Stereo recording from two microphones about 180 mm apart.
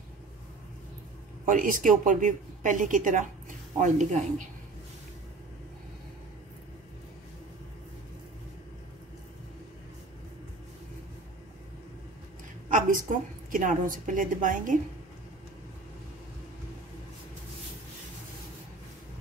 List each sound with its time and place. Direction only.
1.4 s speech: 50° right (ahead or behind)
12.7 s a sound: 50° right (ahead or behind)
13.5 s speech: 45° right (ahead or behind)